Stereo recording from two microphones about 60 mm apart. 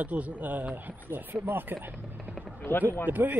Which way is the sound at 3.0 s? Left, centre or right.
Right.